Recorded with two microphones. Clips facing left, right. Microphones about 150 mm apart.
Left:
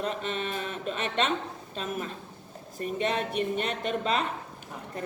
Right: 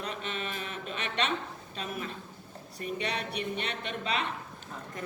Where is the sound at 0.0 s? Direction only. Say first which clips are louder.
Left 5 dB; 40° left (ahead or behind).